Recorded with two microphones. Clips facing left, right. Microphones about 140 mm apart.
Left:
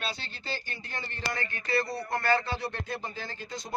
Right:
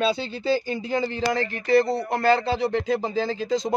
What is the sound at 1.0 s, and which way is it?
Speech, 90° right.